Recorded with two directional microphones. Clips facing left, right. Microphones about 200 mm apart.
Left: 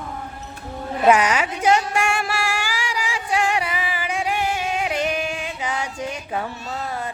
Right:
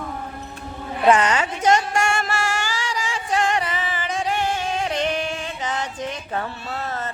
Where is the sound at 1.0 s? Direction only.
10° left (ahead or behind).